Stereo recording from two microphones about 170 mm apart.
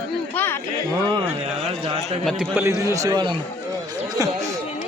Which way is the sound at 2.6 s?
20° right (ahead or behind).